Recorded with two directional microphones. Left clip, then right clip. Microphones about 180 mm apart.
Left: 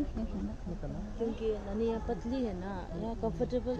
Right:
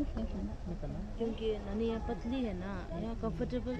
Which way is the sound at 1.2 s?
Centre (ahead or behind).